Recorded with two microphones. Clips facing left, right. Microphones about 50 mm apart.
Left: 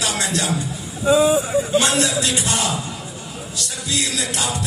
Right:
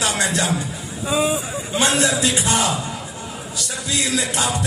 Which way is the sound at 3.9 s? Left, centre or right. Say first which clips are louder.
Right 2 dB; right.